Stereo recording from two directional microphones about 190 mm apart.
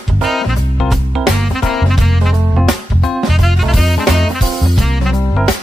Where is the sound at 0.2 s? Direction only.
Centre (ahead or behind).